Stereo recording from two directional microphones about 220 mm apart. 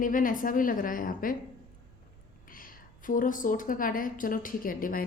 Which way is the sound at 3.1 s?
35° left (ahead or behind).